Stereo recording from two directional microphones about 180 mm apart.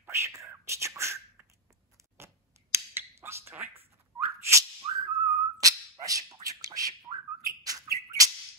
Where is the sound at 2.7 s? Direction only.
15° right (ahead or behind).